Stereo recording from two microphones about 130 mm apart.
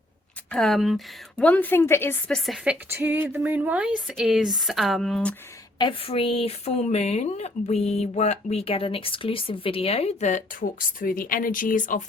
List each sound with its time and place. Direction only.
0.5 s speech: centre (ahead or behind)
1.5 s a woman's voice: 15° left (ahead or behind)
2.9 s speech: 15° right (ahead or behind); by 5.3 s 5° left (ahead or behind)
5.8 s speech: 45° left (ahead or behind); by 12.0 s 90° left